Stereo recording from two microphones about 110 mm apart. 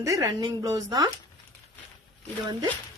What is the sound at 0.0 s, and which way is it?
Speech, 30° right (ahead or behind).